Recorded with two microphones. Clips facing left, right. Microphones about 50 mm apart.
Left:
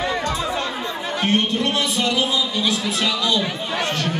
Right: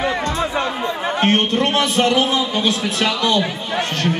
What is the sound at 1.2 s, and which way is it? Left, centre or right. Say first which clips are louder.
A man's voice: right 3 dB; right.